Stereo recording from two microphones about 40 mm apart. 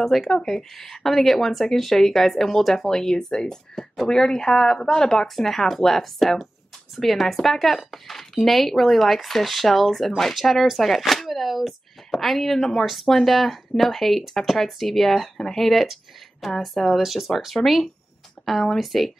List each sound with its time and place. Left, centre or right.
0.0 s speech: centre
3.7 s speech: centre
4.1 s speech: centre
6.1 s speech: centre